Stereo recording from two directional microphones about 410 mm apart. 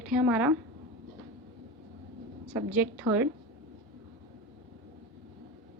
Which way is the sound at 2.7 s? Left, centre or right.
Centre.